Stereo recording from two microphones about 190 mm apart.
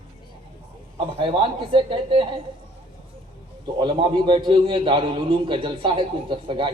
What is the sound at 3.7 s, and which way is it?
A man's voice, 25° right (ahead or behind).